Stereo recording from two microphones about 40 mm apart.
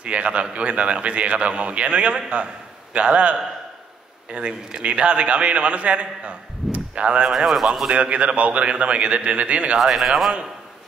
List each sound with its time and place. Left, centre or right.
0.0 s a man's voice: right
7.2 s speech: centre
7.9 s a man's voice: right
9.8 s speech: centre